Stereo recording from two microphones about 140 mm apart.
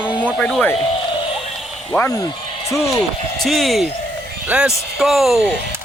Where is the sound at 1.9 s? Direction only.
15° left (ahead or behind).